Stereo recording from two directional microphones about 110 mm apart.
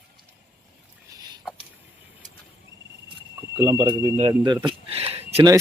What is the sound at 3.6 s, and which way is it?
Speech, 50° right (ahead or behind).